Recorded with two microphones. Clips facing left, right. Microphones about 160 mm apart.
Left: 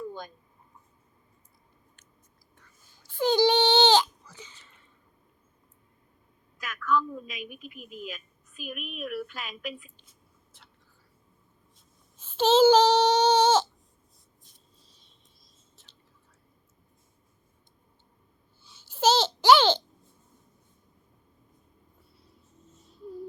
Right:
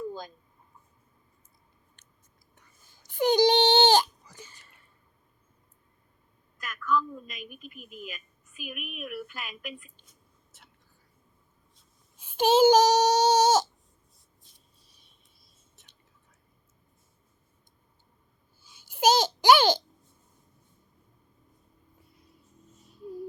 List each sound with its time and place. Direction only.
3.0 s a sound: 15° right (ahead or behind)
6.6 s a woman's voice: centre (ahead or behind)
12.1 s speech: 15° right (ahead or behind)
18.6 s babbling: 10° right (ahead or behind)